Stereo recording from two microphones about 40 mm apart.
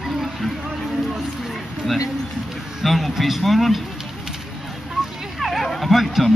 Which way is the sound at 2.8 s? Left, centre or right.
Centre.